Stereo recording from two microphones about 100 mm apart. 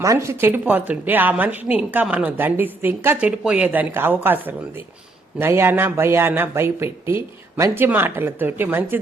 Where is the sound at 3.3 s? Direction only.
10° right (ahead or behind).